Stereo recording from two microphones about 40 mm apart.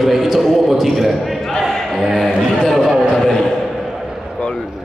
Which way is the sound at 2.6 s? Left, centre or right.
Centre.